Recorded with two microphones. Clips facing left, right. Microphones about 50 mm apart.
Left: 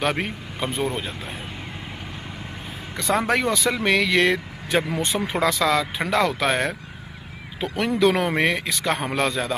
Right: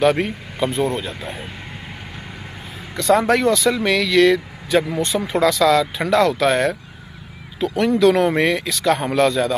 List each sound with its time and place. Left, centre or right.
0.2 s speech: centre
3.0 s speech: centre